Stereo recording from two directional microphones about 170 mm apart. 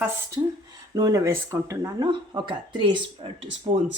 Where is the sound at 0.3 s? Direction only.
25° right (ahead or behind).